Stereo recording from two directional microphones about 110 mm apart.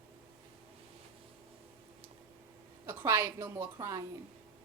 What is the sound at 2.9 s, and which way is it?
Speech, 20° right (ahead or behind).